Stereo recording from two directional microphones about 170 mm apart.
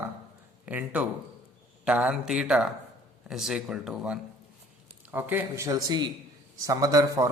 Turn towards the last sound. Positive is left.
turn(degrees=-20)  # may be behind; listen again after turning